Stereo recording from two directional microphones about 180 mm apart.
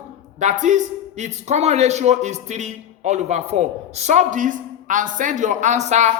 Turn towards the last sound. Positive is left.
turn(degrees=-40)  # may be behind; listen again after turning